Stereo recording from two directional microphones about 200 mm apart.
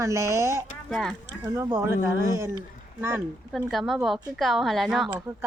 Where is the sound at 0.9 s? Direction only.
Centre (ahead or behind).